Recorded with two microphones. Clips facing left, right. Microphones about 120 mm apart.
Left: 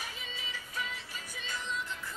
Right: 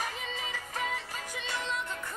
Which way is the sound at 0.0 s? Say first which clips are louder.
Right 7 dB; 50° right (ahead or behind).